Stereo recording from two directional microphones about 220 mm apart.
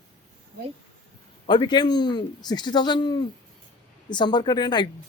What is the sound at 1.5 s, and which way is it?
A woman's voice, 20° left (ahead or behind).